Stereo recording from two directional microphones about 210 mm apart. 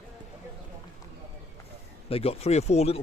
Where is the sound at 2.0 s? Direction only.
30° left (ahead or behind).